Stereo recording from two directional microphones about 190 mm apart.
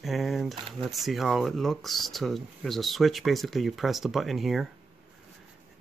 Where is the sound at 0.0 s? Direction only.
Centre (ahead or behind).